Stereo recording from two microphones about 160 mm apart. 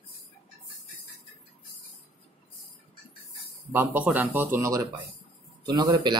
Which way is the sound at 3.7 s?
10° right (ahead or behind).